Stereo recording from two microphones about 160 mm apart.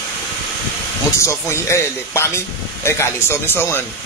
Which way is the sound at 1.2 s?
15° left (ahead or behind).